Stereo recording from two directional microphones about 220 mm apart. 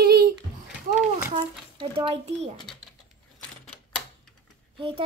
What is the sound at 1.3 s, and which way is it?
A child's voice, 25° right (ahead or behind).